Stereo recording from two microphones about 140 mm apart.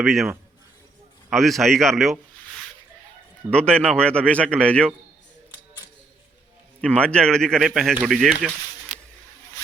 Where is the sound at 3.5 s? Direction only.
5° left (ahead or behind).